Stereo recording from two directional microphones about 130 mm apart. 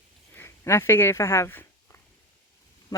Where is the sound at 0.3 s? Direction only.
20° left (ahead or behind).